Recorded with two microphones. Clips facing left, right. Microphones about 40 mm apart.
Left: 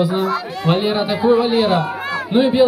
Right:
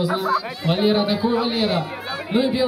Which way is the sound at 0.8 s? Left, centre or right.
Centre.